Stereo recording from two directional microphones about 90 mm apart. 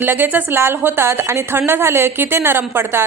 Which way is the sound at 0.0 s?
20° right (ahead or behind).